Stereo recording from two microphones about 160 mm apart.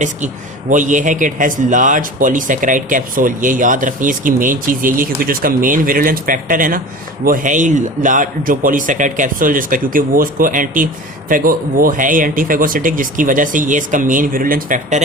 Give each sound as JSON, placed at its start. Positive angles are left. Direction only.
{"t": 0.7, "sound": "speech", "side_deg": -55}